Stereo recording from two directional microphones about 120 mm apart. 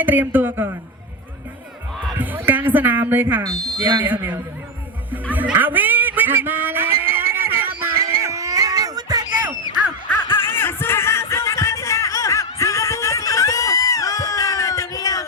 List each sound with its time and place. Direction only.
0.0 s speech: 15° right (ahead or behind)
2.1 s music: 15° right (ahead or behind)
3.5 s speech: centre (ahead or behind)
4.0 s speech: 15° right (ahead or behind)
5.3 s a sound: 15° right (ahead or behind)
8.0 s cat: 25° right (ahead or behind)
10.5 s a sound: 20° left (ahead or behind)